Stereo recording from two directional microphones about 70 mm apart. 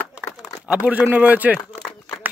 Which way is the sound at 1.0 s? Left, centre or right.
Right.